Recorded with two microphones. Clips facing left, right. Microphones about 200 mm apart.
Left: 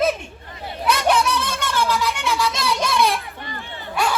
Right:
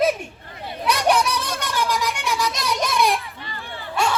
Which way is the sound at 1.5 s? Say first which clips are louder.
Left 2 dB; 40° right (ahead or behind).